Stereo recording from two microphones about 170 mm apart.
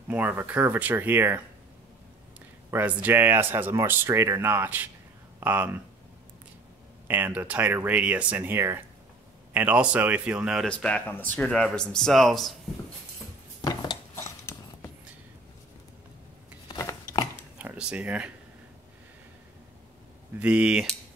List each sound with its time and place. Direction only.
0.1 s speech: 10° right (ahead or behind)
2.7 s speech: 10° right (ahead or behind)
7.1 s speech: 10° right (ahead or behind)
10.7 s speech: 5° left (ahead or behind)
13.6 s dishes: 20° left (ahead or behind)
16.6 s a sound: 25° left (ahead or behind)
17.6 s a sound: 5° right (ahead or behind)
20.3 s speech: 5° right (ahead or behind)